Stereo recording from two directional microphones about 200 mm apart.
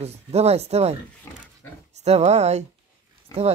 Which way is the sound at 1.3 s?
15° left (ahead or behind).